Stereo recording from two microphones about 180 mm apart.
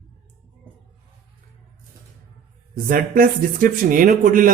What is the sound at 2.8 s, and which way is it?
Speech, 50° right (ahead or behind).